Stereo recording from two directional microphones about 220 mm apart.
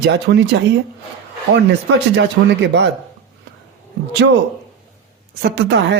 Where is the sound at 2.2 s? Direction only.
55° right (ahead or behind).